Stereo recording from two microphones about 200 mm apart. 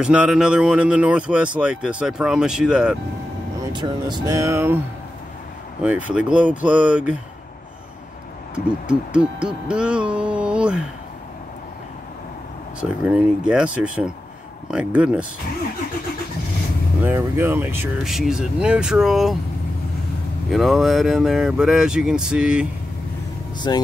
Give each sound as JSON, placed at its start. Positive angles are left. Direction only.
{"t": 0.0, "sound": "speech", "side_deg": -5}
{"t": 3.7, "sound": "speech", "side_deg": -20}
{"t": 5.8, "sound": "speech", "side_deg": -5}
{"t": 8.5, "sound": "speech", "side_deg": -5}
{"t": 12.8, "sound": "speech", "side_deg": -5}
{"t": 17.0, "sound": "speech", "side_deg": -10}
{"t": 20.4, "sound": "speech", "side_deg": 0}
{"t": 23.6, "sound": "speech", "side_deg": 20}